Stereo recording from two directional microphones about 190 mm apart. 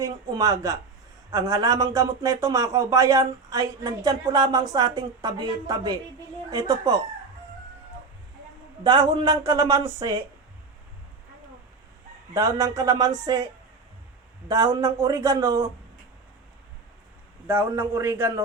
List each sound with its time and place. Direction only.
0.0 s speech: 20° right (ahead or behind)
8.8 s speech: 25° right (ahead or behind)
12.3 s speech: 15° right (ahead or behind)
14.4 s speech: 20° right (ahead or behind)
17.4 s a man's voice: 15° right (ahead or behind)